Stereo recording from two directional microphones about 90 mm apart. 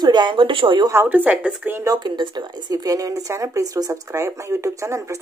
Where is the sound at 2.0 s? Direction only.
55° right (ahead or behind).